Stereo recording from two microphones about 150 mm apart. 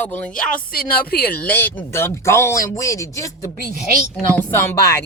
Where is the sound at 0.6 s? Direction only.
75° left (ahead or behind).